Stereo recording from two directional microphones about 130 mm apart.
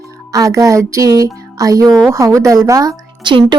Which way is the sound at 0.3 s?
25° right (ahead or behind).